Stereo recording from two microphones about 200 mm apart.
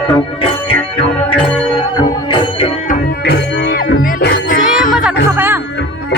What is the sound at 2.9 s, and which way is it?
Music, 55° left (ahead or behind).